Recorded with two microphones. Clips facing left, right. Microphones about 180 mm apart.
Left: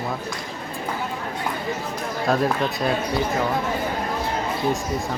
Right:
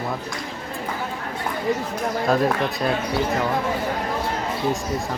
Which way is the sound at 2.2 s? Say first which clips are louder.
Even; centre (ahead or behind).